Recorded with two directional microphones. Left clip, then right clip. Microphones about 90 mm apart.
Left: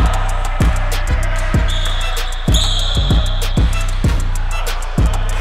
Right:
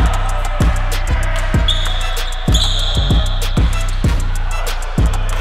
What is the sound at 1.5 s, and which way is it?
Basketball bounce, centre (ahead or behind).